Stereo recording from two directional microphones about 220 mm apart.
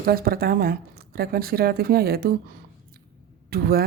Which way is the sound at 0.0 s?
45° right (ahead or behind).